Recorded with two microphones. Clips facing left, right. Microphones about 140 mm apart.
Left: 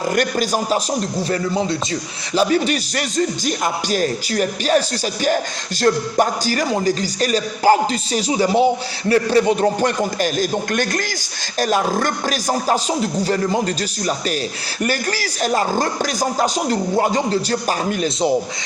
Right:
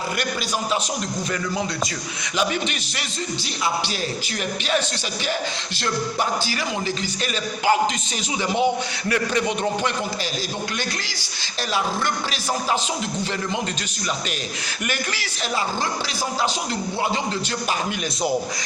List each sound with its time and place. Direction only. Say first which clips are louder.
0.2 s a man's voice: left 7 dB; 45° left (ahead or behind)
2.3 s a man's voice: left 8 dB; 40° left (ahead or behind)
5.8 s a man's voice: left 8 dB; 45° left (ahead or behind)
14.8 s a man's voice: left 7 dB; 40° left (ahead or behind)